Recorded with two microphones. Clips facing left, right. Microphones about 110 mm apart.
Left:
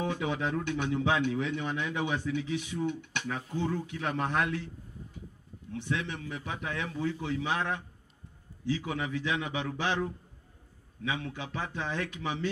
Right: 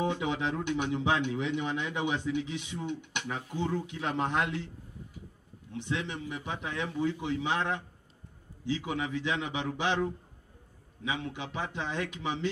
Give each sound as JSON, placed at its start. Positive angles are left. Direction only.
{"t": 0.0, "sound": "a man's voice", "side_deg": -20}
{"t": 5.7, "sound": "a man's voice", "side_deg": -20}